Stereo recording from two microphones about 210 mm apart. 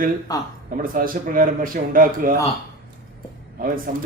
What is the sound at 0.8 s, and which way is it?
A man's voice, 40° right (ahead or behind).